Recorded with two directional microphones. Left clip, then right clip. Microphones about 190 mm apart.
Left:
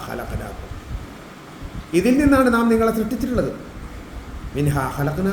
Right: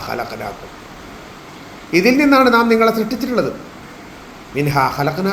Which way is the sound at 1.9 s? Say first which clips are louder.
Right 4 dB; 15° left (ahead or behind).